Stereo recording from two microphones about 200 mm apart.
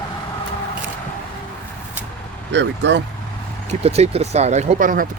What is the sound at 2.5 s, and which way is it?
Speech, 65° right (ahead or behind).